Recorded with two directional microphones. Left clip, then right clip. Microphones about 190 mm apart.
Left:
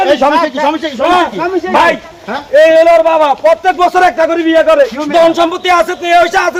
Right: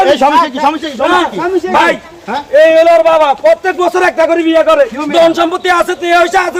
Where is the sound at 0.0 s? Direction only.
50° right (ahead or behind).